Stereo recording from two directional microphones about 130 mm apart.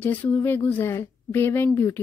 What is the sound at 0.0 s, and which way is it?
Speech, 15° left (ahead or behind).